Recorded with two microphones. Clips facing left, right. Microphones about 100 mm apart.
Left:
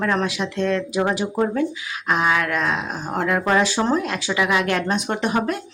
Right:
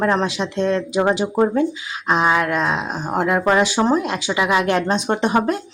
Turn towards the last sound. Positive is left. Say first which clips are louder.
# right 4 dB
turn(degrees=-25)  # may be behind; listen again after turning